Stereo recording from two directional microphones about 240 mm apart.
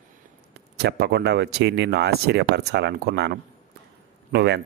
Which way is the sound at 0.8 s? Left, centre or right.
Right.